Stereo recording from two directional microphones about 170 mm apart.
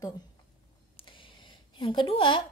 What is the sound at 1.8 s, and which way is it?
Speech, 25° left (ahead or behind).